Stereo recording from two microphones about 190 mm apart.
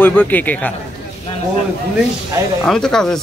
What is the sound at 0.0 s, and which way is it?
Speech, 10° left (ahead or behind).